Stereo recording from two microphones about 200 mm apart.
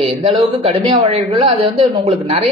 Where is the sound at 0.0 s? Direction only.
25° right (ahead or behind).